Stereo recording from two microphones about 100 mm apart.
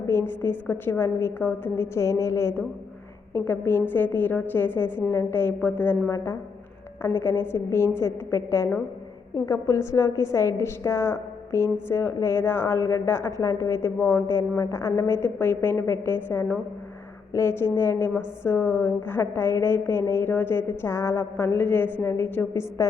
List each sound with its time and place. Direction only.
0.1 s a woman's voice: 25° left (ahead or behind)